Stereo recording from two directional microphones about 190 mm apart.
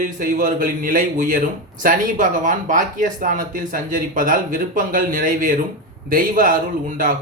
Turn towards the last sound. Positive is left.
turn(degrees=-45)  # may be behind; listen again after turning